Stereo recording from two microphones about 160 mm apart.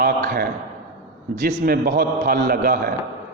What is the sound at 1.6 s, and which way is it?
Speech, 70° right (ahead or behind).